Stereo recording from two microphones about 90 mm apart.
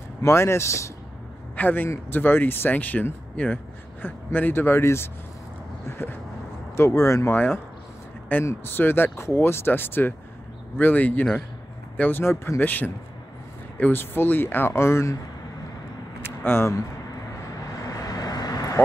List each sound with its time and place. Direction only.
0.2 s speech: 30° left (ahead or behind)
8.5 s speech: 25° left (ahead or behind)
16.2 s vehicle: 25° left (ahead or behind)
17.7 s vehicle: 40° left (ahead or behind)